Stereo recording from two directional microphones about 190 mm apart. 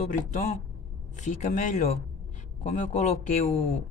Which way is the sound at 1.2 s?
40° left (ahead or behind).